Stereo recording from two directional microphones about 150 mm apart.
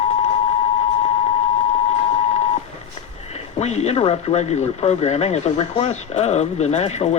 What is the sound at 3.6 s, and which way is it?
Speech, 45° left (ahead or behind).